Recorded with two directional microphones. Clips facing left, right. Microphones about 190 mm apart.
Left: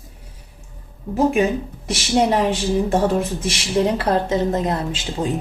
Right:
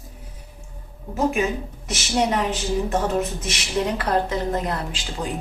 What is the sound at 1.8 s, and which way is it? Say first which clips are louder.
Speech: left 4 dB; 30° left (ahead or behind).